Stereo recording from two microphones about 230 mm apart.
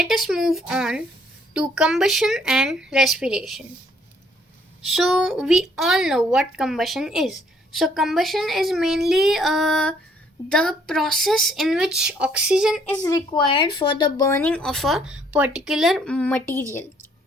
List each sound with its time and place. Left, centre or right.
0.0 s a woman's voice: centre
4.9 s a woman's voice: centre
12.9 s a woman's voice: centre
14.3 s a woman's voice: centre